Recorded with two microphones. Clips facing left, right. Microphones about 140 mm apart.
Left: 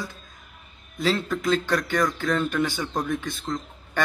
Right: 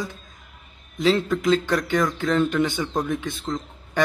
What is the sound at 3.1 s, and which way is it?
Speech, 20° right (ahead or behind).